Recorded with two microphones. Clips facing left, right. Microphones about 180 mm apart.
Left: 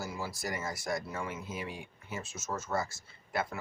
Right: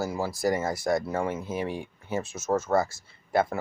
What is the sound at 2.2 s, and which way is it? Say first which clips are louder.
Speech: right 12 dB; 60° right (ahead or behind).